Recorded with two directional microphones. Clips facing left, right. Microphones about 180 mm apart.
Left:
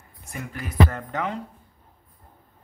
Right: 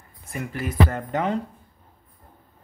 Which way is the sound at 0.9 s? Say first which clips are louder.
Right 4 dB; 20° right (ahead or behind).